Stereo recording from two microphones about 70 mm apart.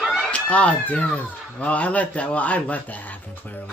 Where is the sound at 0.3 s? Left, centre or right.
Centre.